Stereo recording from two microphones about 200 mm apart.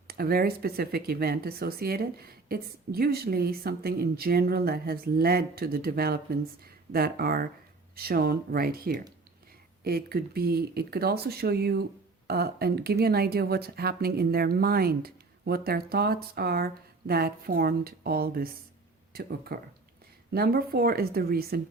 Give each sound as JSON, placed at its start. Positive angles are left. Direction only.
{"t": 0.1, "sound": "speech", "side_deg": -50}